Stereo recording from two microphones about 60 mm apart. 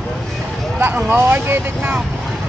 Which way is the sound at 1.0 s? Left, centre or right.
Right.